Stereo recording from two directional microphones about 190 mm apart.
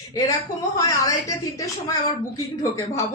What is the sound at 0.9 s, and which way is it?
Speech, 15° left (ahead or behind).